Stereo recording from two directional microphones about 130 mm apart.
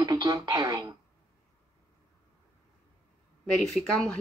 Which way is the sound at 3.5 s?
5° left (ahead or behind).